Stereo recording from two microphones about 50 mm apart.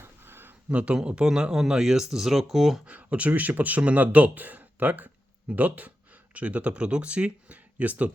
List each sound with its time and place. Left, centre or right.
0.0 s a sound: right
0.7 s speech: right; by 2.8 s centre
2.8 s speech: right